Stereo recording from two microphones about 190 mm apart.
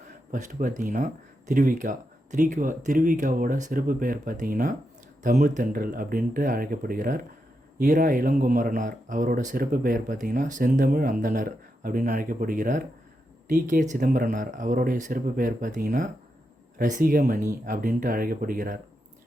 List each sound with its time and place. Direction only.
0.3 s speech: 45° right (ahead or behind)